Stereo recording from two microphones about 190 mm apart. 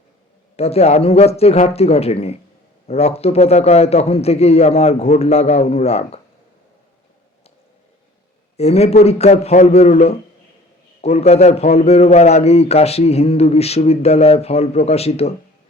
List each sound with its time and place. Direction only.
0.5 s a man's voice: 35° left (ahead or behind)
8.5 s a man's voice: 35° left (ahead or behind)